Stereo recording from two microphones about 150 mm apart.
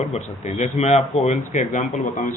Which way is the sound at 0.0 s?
45° left (ahead or behind).